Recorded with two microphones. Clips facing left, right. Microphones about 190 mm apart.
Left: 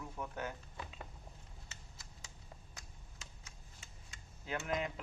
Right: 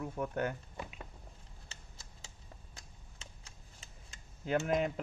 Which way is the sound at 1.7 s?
30° right (ahead or behind).